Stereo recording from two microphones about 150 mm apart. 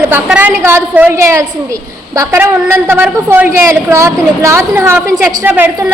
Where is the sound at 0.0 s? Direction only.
10° right (ahead or behind).